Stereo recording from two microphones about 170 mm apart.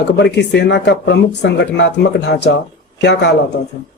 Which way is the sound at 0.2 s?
80° left.